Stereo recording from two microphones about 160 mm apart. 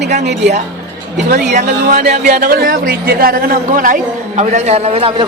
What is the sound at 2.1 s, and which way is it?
Speech, 50° right (ahead or behind).